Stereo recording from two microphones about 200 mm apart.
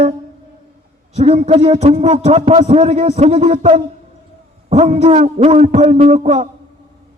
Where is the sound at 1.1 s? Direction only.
30° right (ahead or behind).